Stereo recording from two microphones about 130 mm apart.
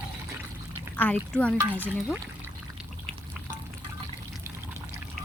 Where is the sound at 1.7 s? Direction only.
10° right (ahead or behind).